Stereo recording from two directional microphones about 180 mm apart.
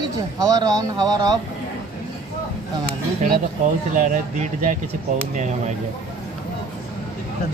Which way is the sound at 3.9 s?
45° right (ahead or behind).